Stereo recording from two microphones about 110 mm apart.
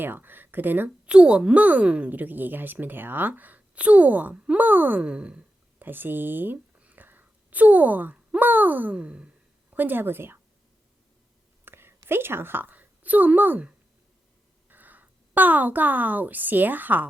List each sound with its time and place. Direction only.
0.0 s speech: 20° right (ahead or behind)
11.6 s a sound: 20° right (ahead or behind)
14.7 s a woman's voice: 15° right (ahead or behind)